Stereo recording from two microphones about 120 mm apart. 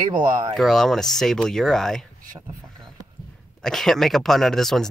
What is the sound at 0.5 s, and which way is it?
Speech, centre (ahead or behind).